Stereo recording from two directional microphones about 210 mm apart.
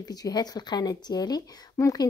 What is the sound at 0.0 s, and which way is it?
Speech, 20° left (ahead or behind).